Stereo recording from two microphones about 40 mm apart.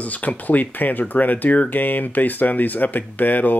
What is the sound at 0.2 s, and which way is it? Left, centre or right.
Speech, left.